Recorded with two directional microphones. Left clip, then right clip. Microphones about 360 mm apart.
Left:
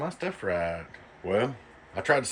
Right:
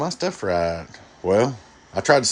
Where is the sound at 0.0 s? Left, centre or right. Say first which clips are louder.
Right 7 dB; centre.